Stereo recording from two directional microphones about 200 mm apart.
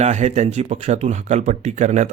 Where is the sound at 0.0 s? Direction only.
35° right (ahead or behind).